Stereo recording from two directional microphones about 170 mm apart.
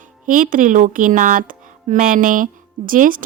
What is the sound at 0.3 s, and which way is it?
A woman's voice, 55° right (ahead or behind).